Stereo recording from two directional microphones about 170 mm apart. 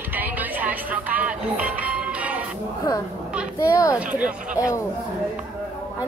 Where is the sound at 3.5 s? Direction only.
20° left (ahead or behind).